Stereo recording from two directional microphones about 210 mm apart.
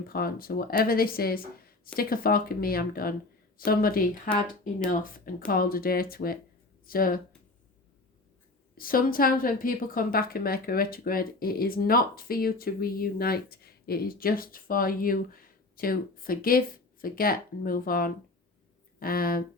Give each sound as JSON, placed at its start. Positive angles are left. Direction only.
{"t": 0.1, "sound": "a woman's voice", "side_deg": 45}
{"t": 5.5, "sound": "a woman's voice", "side_deg": 45}
{"t": 8.7, "sound": "a woman's voice", "side_deg": 45}